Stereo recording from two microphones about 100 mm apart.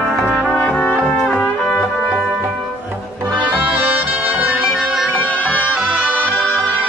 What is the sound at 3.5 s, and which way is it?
Brass instrument, 15° right (ahead or behind).